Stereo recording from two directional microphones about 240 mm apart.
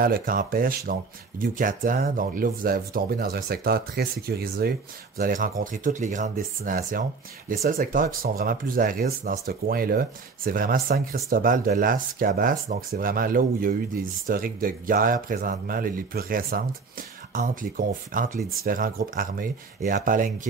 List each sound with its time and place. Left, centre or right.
0.0 s speech: right